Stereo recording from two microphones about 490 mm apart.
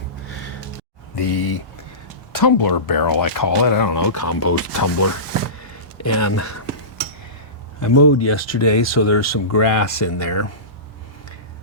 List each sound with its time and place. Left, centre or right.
0.3 s gasp: left
1.2 s speech: left
7.8 s speech: left